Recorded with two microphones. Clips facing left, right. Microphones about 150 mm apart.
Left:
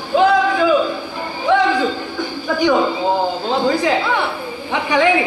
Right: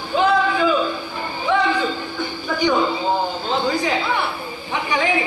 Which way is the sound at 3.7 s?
75° left (ahead or behind).